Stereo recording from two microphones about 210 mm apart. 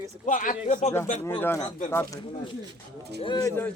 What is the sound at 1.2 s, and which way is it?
Speech, 10° left (ahead or behind).